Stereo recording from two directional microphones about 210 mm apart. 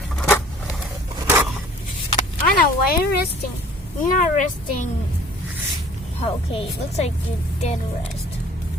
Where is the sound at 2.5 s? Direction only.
45° left (ahead or behind).